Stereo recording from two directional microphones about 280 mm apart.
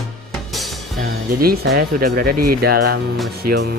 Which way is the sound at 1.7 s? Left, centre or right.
Right.